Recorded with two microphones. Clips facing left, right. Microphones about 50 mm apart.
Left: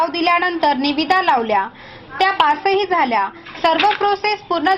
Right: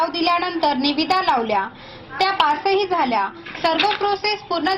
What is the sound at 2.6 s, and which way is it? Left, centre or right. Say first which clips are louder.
Speech: left 2 dB; left.